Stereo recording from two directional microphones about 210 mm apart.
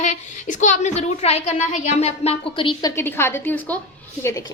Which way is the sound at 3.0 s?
10° left (ahead or behind).